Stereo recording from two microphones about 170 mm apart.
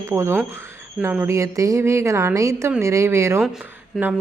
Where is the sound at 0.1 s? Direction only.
15° right (ahead or behind).